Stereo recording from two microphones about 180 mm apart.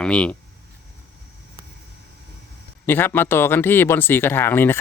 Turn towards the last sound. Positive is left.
turn(degrees=10)  # may be behind; listen again after turning